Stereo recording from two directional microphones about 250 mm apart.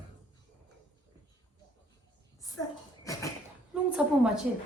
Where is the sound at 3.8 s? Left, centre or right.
Centre.